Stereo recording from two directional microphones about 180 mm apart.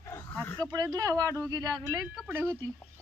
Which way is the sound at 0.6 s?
20° right (ahead or behind).